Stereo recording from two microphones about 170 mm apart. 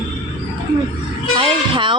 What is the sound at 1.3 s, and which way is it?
Speech, 30° right (ahead or behind).